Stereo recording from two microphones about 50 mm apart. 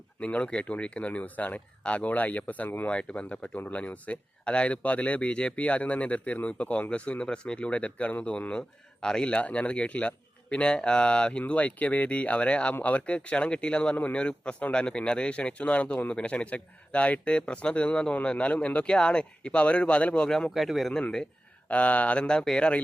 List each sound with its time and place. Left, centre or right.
0.2 s speech: left
2.9 s speech: left
20.2 s a man's voice: centre
20.5 s a man's voice: centre
21.7 s speech: left